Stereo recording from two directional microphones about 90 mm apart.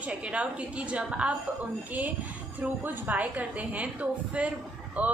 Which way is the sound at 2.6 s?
20° right (ahead or behind).